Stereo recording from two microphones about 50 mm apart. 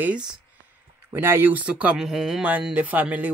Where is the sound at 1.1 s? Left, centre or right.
Right.